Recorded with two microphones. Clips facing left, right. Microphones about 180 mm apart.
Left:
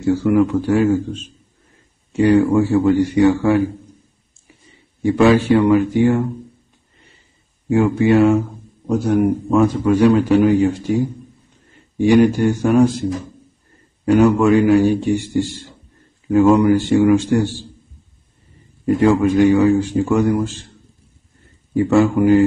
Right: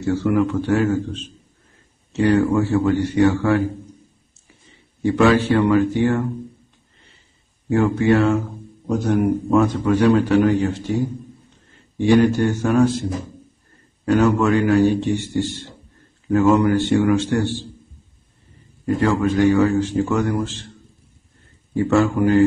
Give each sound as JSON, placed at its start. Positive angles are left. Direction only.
{"t": 0.0, "sound": "a man's voice", "side_deg": 10}
{"t": 5.0, "sound": "a man's voice", "side_deg": 15}
{"t": 7.7, "sound": "a man's voice", "side_deg": 15}
{"t": 12.0, "sound": "a man's voice", "side_deg": 15}
{"t": 14.0, "sound": "a man's voice", "side_deg": 15}
{"t": 18.9, "sound": "a man's voice", "side_deg": 15}
{"t": 21.7, "sound": "a man's voice", "side_deg": 15}